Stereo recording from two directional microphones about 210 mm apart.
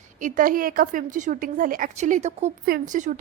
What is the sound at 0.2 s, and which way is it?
A woman's voice, 40° right (ahead or behind).